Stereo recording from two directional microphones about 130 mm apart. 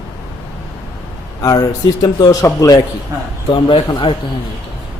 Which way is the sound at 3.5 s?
40° left (ahead or behind).